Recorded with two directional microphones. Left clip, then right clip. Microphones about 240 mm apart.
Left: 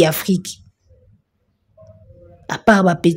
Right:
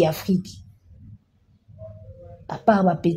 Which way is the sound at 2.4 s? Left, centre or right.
Left.